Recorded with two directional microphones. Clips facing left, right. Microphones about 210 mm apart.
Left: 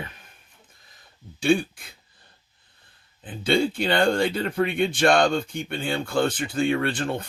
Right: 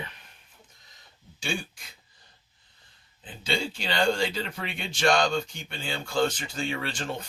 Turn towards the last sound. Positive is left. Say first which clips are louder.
# left 7 dB
turn(degrees=55)  # may be behind; listen again after turning